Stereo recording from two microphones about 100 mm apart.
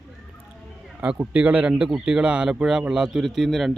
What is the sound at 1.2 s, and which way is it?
A man's voice, 15° right (ahead or behind).